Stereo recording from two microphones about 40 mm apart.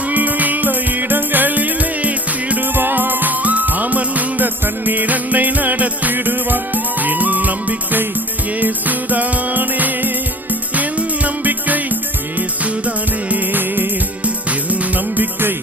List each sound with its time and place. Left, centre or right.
0.1 s music: right
2.7 s music: right
6.1 s music: right
13.3 s music: right
14.3 s music: right